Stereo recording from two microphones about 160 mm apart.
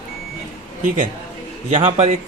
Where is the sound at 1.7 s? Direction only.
45° right (ahead or behind).